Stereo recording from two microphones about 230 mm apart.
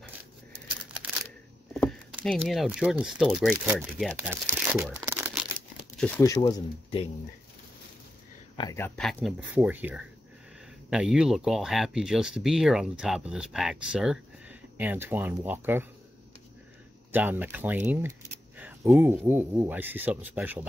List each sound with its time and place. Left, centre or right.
1.7 s speech: centre
4.7 s tearing: centre
5.9 s speech: centre
8.5 s speech: centre
17.1 s speech: centre